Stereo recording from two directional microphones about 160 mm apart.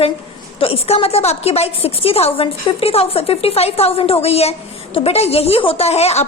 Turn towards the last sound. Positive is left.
turn(degrees=40)  # may be behind; listen again after turning